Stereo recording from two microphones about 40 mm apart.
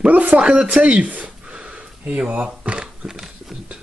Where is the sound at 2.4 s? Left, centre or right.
Right.